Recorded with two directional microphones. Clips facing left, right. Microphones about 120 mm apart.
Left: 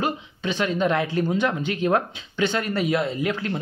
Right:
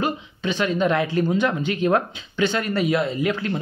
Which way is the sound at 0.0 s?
35° left (ahead or behind).